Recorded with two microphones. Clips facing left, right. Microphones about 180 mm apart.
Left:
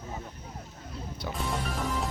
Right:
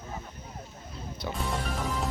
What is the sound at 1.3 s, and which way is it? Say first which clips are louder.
Music: even; centre (ahead or behind).